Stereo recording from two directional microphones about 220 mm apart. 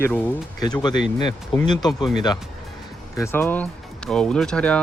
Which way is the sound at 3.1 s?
10° left (ahead or behind).